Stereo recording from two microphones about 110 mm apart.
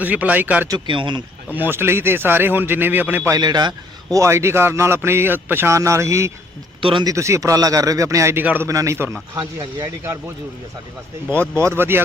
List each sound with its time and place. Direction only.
0.0 s a man's voice: 15° right (ahead or behind)
0.9 s speech: 45° right (ahead or behind)
1.5 s a man's voice: 15° right (ahead or behind)
3.2 s speech: 35° right (ahead or behind)
4.2 s a man's voice: 25° right (ahead or behind)
11.5 s a man's voice: 25° right (ahead or behind)